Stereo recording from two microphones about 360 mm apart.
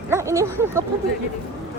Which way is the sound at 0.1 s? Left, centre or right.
Centre.